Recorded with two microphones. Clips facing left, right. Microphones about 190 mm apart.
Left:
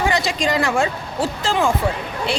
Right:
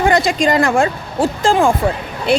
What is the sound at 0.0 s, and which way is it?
A woman's voice, 50° right (ahead or behind).